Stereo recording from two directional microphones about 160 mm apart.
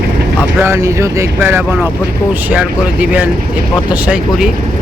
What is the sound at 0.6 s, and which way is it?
Speech, 20° right (ahead or behind).